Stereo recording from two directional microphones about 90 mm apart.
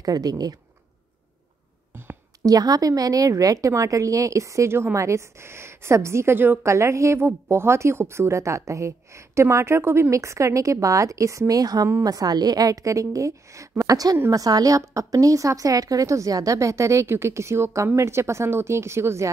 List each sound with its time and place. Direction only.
0.0 s a woman's voice: 45° right (ahead or behind)
2.4 s a woman's voice: 45° right (ahead or behind)